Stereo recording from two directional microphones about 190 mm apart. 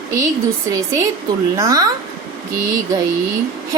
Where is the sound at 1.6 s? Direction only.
20° right (ahead or behind).